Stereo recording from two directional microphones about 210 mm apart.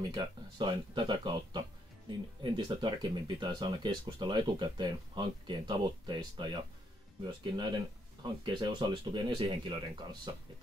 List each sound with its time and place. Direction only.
0.1 s speech: 20° right (ahead or behind)